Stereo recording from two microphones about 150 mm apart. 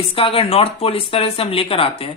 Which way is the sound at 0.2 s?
40° left (ahead or behind).